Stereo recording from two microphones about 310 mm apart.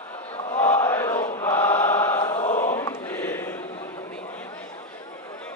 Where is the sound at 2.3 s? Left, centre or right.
Left.